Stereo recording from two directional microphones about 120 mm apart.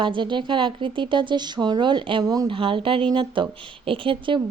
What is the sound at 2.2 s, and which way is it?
Speech, 30° right (ahead or behind).